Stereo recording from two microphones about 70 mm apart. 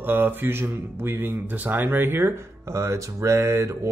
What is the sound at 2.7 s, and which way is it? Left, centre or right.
Speech, right.